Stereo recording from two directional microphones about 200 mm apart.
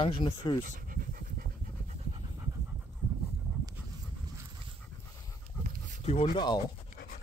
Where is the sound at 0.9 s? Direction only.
45° right (ahead or behind).